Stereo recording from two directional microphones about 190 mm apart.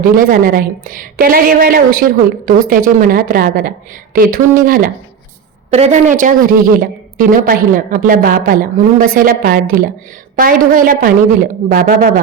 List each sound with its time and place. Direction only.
0.0 s a woman's voice: 45° right (ahead or behind)
5.7 s a woman's voice: 35° right (ahead or behind)